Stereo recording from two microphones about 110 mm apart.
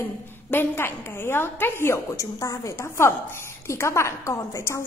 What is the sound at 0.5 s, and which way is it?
A woman's voice, 20° left (ahead or behind).